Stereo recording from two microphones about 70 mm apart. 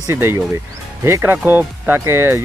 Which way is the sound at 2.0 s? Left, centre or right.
Right.